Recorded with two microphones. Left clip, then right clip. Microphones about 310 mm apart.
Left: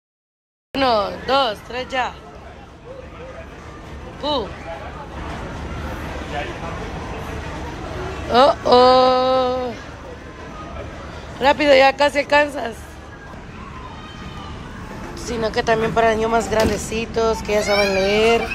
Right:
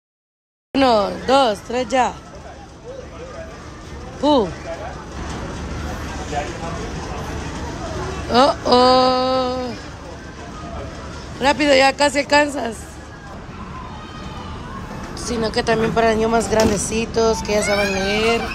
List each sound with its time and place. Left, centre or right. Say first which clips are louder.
0.7 s speech: right 2 dB; centre
4.2 s speech: right 6 dB; centre
8.3 s speech: left 1 dB; centre
11.3 s speech: left 1 dB; centre
15.1 s speech: even; centre